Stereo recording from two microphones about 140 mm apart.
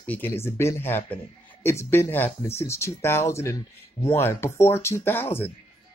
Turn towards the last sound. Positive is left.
turn(degrees=15)  # may be behind; listen again after turning